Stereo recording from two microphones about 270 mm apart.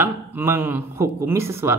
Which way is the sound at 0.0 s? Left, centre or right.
Centre.